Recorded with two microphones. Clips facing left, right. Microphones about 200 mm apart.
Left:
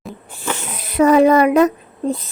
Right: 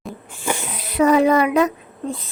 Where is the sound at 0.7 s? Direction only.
50° left (ahead or behind).